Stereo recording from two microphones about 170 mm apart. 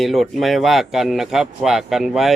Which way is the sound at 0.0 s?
Centre (ahead or behind).